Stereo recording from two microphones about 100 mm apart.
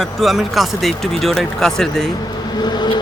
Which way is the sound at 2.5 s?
45° left (ahead or behind).